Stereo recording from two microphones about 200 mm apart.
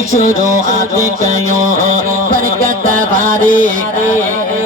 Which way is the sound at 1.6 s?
45° right (ahead or behind).